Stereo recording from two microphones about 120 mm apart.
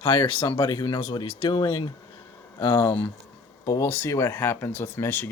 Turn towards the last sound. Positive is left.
turn(degrees=15)  # may be behind; listen again after turning